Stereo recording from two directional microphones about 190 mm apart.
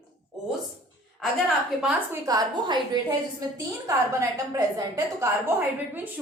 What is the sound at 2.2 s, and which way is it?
Speech, 20° right (ahead or behind).